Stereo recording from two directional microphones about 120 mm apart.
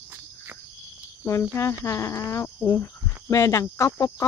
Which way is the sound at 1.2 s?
25° left (ahead or behind).